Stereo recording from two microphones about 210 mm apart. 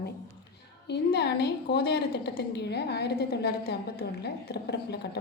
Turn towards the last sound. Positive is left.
turn(degrees=50)  # may be behind; listen again after turning